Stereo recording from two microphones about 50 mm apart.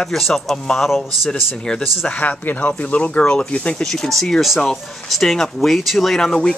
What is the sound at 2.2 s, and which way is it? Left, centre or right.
Speech, left.